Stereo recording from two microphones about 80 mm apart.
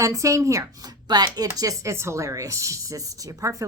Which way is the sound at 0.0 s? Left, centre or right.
Right.